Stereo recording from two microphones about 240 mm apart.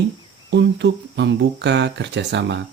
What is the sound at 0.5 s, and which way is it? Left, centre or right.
Speech, right.